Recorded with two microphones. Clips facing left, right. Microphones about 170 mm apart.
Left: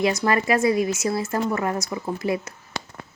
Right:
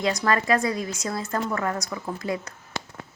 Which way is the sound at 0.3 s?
20° left (ahead or behind).